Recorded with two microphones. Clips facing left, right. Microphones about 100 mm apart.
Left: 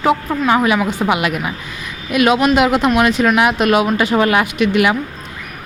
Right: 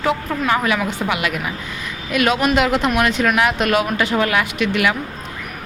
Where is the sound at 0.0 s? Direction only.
20° left (ahead or behind).